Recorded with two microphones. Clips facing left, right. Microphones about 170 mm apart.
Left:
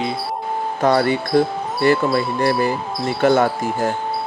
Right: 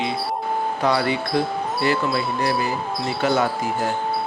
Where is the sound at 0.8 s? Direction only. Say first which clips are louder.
Left 6 dB; 45° left (ahead or behind).